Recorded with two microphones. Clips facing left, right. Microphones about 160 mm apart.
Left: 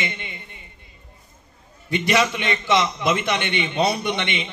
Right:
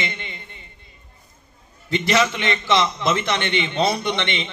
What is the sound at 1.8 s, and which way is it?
A man's voice, 15° left (ahead or behind).